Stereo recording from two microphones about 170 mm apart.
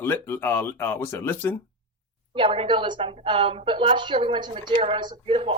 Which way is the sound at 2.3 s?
30° right (ahead or behind).